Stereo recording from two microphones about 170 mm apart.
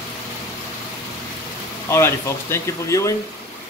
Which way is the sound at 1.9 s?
15° left (ahead or behind).